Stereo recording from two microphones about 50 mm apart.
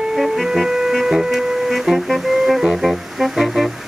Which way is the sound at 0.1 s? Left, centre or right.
Centre.